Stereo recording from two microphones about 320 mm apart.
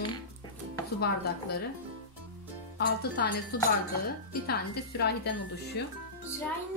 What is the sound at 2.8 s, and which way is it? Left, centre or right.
Speech, left.